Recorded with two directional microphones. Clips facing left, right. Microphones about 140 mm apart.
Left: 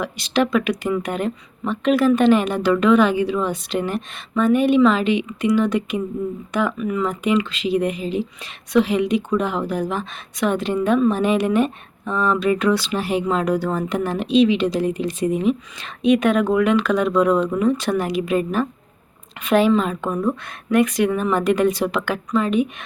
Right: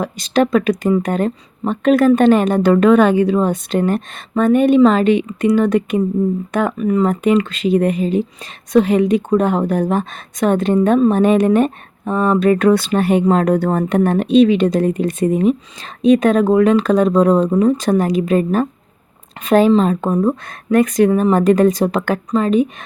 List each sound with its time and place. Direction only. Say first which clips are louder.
0.0 s speech: right 4 dB; 45° right (ahead or behind)
6.7 s speech: right 7 dB; 40° right (ahead or behind)